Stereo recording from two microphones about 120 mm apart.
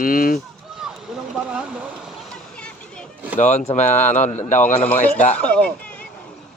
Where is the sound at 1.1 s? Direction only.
5° right (ahead or behind).